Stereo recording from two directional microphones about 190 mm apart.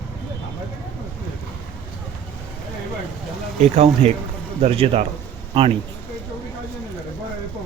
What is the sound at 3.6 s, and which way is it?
Speech, 35° right (ahead or behind).